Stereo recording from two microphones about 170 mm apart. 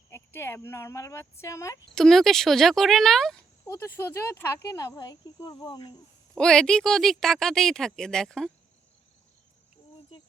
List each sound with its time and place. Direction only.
0.1 s speech: 15° left (ahead or behind)
2.0 s speech: centre (ahead or behind)
3.7 s speech: 15° left (ahead or behind)
6.3 s speech: 5° left (ahead or behind)